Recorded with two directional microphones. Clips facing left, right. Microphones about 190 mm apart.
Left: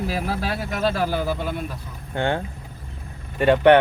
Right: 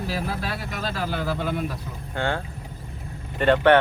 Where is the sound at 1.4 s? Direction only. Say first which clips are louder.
Right 1 dB; centre (ahead or behind).